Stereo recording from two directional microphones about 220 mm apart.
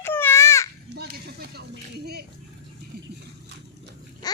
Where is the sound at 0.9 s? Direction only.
45° right (ahead or behind).